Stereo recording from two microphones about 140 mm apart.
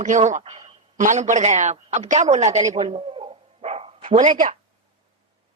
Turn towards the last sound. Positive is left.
turn(degrees=-40)  # may be behind; listen again after turning